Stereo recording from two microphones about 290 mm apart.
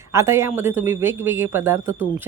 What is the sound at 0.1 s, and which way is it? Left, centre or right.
Speech, centre.